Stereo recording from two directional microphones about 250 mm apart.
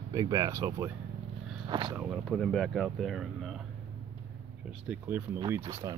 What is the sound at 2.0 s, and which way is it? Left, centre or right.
Speech, centre.